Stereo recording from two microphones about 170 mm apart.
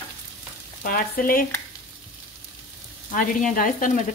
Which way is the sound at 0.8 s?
60° left (ahead or behind).